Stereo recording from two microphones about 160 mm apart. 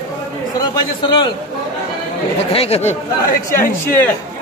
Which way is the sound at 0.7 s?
30° left (ahead or behind).